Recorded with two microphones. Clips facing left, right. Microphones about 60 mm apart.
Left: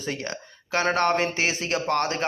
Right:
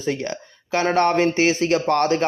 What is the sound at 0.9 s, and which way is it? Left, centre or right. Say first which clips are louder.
Speech: right 5 dB; right.